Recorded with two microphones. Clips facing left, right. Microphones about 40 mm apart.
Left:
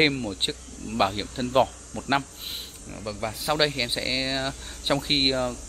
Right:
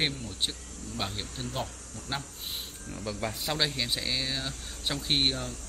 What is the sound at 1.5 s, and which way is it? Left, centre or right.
Speech, left.